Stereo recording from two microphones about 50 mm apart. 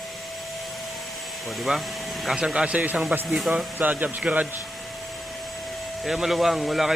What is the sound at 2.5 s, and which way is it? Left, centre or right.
A man's voice, right.